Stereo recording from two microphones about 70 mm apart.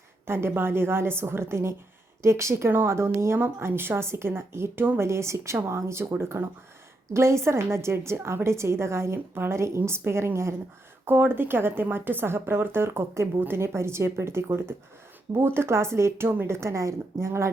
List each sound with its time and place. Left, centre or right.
0.3 s a woman's voice: right